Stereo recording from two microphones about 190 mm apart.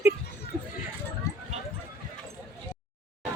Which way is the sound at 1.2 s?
15° left (ahead or behind).